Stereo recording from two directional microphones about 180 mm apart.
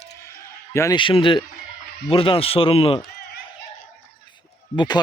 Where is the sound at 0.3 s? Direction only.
15° left (ahead or behind).